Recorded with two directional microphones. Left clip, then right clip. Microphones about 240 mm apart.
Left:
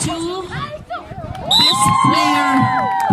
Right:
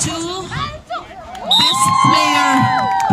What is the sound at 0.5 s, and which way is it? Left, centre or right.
Chatter, right.